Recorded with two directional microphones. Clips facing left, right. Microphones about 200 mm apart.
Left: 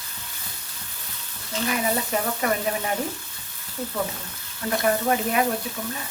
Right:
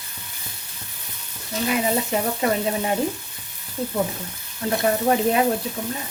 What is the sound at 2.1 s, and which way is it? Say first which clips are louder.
Speech: right 3 dB; 20° right (ahead or behind).